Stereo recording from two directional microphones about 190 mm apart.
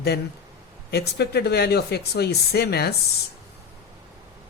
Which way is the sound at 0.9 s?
60° left (ahead or behind).